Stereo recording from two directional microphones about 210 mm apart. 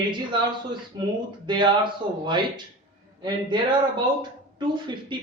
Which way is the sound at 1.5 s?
20° right (ahead or behind).